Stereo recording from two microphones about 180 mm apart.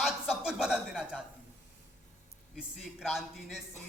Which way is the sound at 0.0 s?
Centre (ahead or behind).